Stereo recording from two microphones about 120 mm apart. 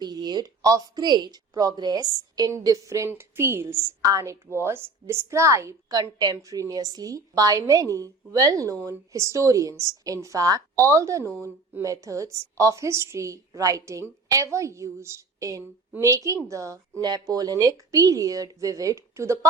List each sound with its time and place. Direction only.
0.0 s a woman's voice: 35° right (ahead or behind)